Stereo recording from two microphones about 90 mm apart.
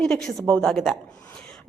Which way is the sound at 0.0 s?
5° left (ahead or behind).